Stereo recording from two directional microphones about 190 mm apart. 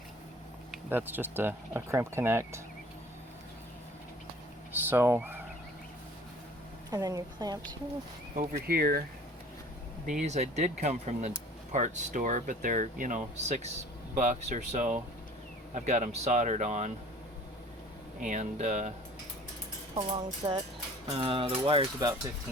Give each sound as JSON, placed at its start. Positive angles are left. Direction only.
{"t": 0.7, "sound": "speech", "side_deg": -10}
{"t": 4.7, "sound": "speech", "side_deg": -10}
{"t": 6.9, "sound": "speech", "side_deg": -20}
{"t": 8.4, "sound": "speech", "side_deg": -50}
{"t": 10.1, "sound": "speech", "side_deg": -40}
{"t": 18.2, "sound": "speech", "side_deg": -40}
{"t": 20.0, "sound": "speech", "side_deg": -30}